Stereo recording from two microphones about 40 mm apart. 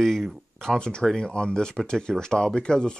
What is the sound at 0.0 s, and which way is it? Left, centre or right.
Speech, centre.